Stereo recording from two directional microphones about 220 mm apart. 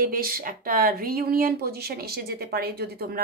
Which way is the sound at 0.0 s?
40° right (ahead or behind).